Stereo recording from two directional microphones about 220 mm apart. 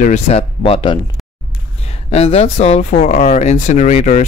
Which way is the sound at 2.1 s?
30° left (ahead or behind).